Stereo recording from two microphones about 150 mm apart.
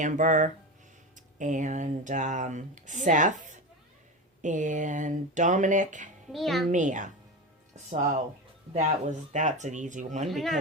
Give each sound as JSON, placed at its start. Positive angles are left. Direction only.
{"t": 0.0, "sound": "speech", "side_deg": -55}
{"t": 6.3, "sound": "a child's voice", "side_deg": 0}
{"t": 6.7, "sound": "speech", "side_deg": -55}
{"t": 8.7, "sound": "speech", "side_deg": -50}
{"t": 10.2, "sound": "a child's voice", "side_deg": 0}